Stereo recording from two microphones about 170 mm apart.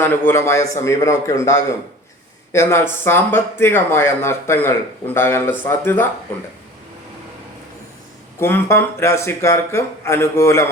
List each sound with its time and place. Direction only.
0.0 s speech: 10° left (ahead or behind)
8.4 s speech: 15° left (ahead or behind)